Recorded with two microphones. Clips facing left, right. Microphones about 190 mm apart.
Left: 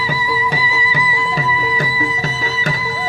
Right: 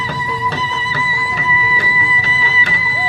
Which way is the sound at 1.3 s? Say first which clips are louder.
Left 1 dB; 40° left (ahead or behind).